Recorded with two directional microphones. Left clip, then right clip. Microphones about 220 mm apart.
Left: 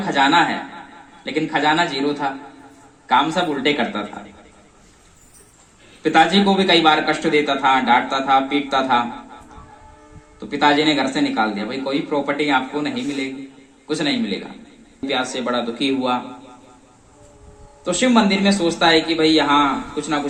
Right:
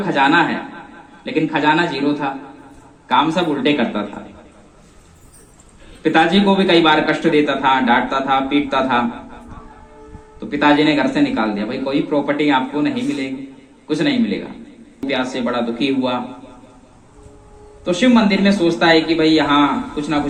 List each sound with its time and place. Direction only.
0.0 s a man's voice: 45° left (ahead or behind)
6.0 s a man's voice: 45° left (ahead or behind)
10.5 s a man's voice: 45° left (ahead or behind)
17.8 s a man's voice: 45° left (ahead or behind)